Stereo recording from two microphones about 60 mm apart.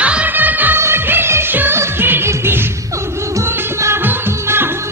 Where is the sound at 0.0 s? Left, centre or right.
Right.